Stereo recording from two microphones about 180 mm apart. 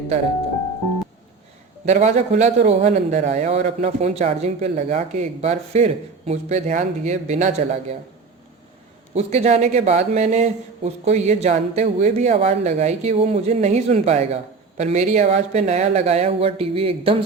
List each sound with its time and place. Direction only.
1.8 s a man's voice: 40° right (ahead or behind)
9.1 s a man's voice: 35° right (ahead or behind)